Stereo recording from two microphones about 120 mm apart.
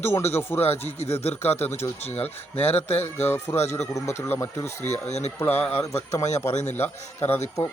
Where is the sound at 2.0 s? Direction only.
65° left (ahead or behind).